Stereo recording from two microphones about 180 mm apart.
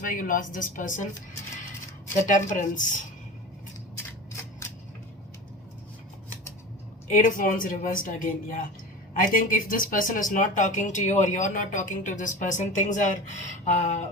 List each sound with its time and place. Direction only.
0.0 s speech: 50° left (ahead or behind)
2.3 s speech: 45° left (ahead or behind)
3.9 s scissors: 15° left (ahead or behind)
7.1 s speech: 50° left (ahead or behind)
13.5 s a sound: 40° left (ahead or behind)